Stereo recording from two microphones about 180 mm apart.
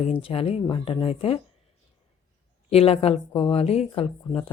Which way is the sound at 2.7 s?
35° left (ahead or behind).